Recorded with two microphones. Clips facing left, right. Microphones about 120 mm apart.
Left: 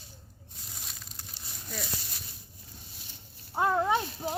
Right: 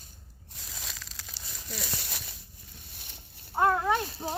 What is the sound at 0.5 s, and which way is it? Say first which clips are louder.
Crumpling: right 3 dB; 90° right.